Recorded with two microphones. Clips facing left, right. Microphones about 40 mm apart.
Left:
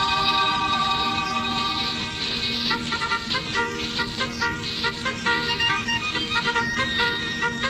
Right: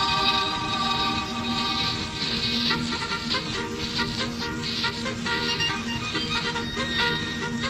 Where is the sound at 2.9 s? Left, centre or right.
Left.